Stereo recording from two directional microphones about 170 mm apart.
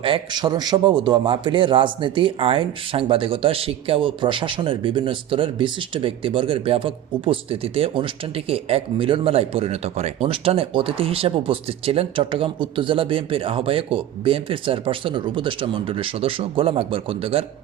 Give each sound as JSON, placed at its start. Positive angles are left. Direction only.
{"t": 0.0, "sound": "a man's voice", "side_deg": -30}